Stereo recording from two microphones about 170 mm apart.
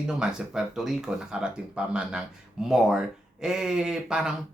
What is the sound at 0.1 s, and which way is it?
Speech, 5° right (ahead or behind).